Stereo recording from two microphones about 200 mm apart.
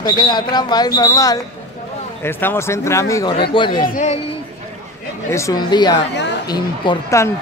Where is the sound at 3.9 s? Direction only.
35° left (ahead or behind).